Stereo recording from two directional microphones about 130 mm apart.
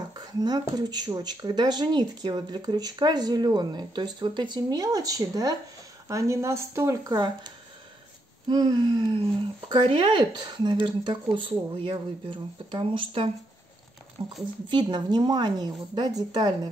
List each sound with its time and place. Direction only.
0.1 s speech: 30° right (ahead or behind); by 14.3 s 45° right (ahead or behind)
14.7 s speech: 35° right (ahead or behind)